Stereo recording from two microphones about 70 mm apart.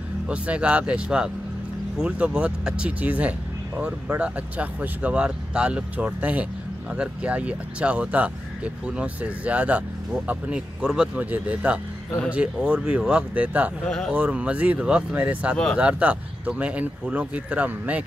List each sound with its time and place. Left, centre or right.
0.3 s speech: centre
13.3 s speech: right
13.8 s speech: centre
14.1 s speech: centre
15.5 s speech: centre
15.8 s speech: centre